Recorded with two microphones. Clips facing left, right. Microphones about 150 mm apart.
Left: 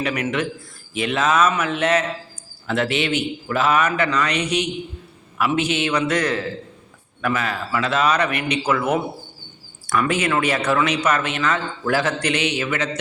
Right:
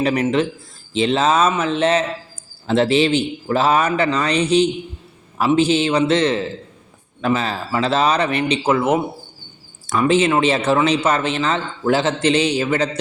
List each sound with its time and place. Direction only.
0.0 s speech: 30° right (ahead or behind)